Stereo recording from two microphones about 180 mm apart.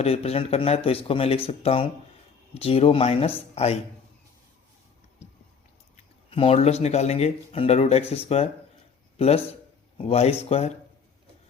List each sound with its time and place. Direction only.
0.0 s a man's voice: 35° left (ahead or behind)
6.3 s speech: 35° left (ahead or behind)